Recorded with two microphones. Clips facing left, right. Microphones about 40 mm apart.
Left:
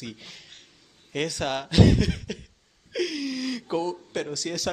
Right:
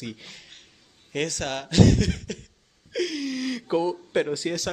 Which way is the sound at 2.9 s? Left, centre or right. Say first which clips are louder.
Right 1 dB; centre.